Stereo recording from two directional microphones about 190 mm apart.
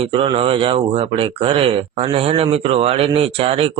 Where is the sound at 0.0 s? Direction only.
30° right (ahead or behind).